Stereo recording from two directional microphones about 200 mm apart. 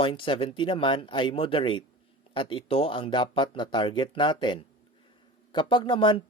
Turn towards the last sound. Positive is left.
turn(degrees=25)  # may be behind; listen again after turning